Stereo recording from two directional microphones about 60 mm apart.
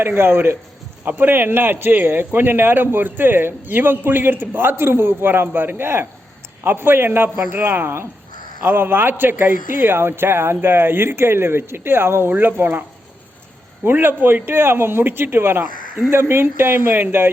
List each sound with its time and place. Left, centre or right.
0.0 s a man's voice: right
13.8 s a man's voice: right